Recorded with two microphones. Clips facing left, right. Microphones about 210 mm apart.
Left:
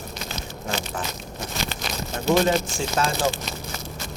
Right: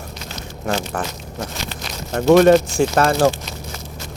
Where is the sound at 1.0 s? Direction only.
60° right (ahead or behind).